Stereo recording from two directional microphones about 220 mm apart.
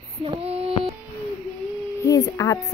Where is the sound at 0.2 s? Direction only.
25° right (ahead or behind).